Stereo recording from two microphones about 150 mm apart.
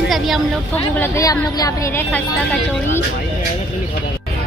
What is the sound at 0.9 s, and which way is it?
A woman's voice, 15° left (ahead or behind).